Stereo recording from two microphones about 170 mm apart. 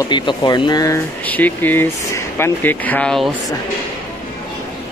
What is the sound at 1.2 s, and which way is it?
Speech, 10° left (ahead or behind).